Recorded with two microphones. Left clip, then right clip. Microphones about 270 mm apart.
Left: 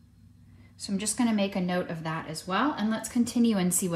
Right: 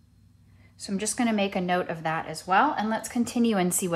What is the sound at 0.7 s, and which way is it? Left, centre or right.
Speech, centre.